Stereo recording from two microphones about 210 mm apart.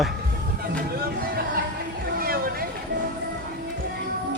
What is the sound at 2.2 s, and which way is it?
Vehicle, 45° right (ahead or behind).